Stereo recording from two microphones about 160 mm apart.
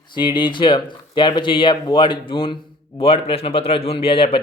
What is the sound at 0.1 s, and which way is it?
Speech, 30° left (ahead or behind).